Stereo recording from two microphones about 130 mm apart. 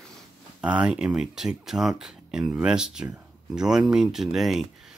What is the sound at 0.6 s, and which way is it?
Speech, 10° right (ahead or behind).